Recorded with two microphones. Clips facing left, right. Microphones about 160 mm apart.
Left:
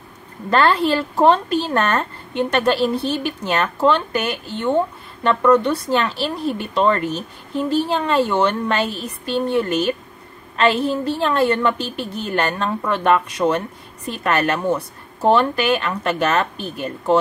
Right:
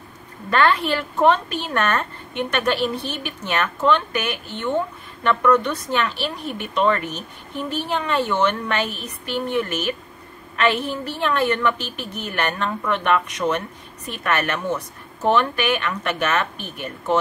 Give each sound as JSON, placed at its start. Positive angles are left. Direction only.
{"t": 0.5, "sound": "speech", "side_deg": 35}